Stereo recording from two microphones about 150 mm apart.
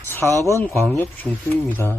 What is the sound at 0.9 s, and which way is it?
Speech, 15° left (ahead or behind).